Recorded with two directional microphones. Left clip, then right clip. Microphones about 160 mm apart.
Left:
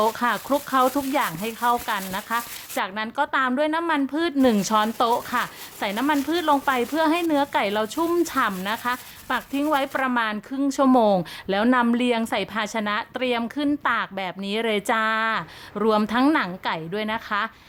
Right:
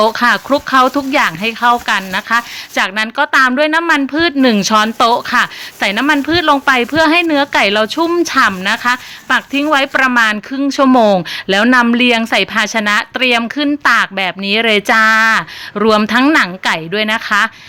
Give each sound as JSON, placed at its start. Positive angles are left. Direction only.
{"t": 0.0, "sound": "a woman's voice", "side_deg": -15}